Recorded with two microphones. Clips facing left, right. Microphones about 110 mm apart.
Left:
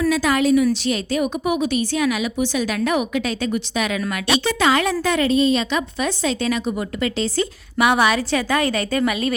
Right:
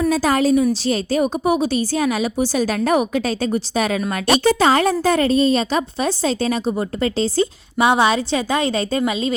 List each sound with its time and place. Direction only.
0.1 s a woman's voice: 35° right (ahead or behind)